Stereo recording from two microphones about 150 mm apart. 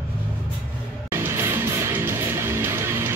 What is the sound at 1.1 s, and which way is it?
Music, 15° right (ahead or behind).